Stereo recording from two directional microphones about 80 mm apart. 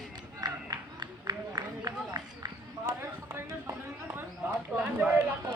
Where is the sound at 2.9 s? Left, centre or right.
Right.